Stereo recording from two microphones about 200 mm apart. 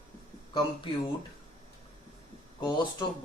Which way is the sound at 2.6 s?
20° left (ahead or behind).